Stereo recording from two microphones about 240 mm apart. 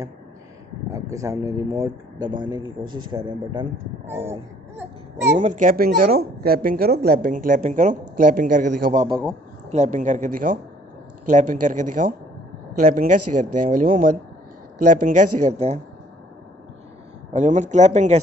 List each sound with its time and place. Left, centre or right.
0.8 s speech: centre
5.2 s a woman's voice: right
17.3 s speech: right